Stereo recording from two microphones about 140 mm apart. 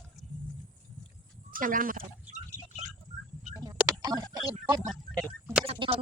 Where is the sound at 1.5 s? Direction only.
85° right.